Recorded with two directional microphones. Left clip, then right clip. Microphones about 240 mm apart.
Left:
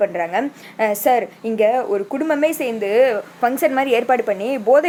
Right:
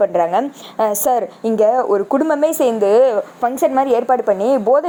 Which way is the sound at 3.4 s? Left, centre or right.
Centre.